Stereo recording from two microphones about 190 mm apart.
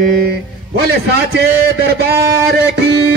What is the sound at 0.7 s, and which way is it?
Speech, 60° right (ahead or behind).